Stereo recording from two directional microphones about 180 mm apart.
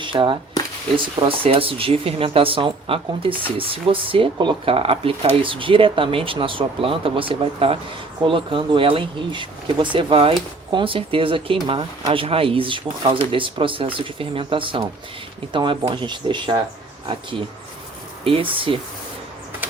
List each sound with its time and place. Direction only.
0.0 s speech: 25° right (ahead or behind)
18.5 s speech: 30° right (ahead or behind)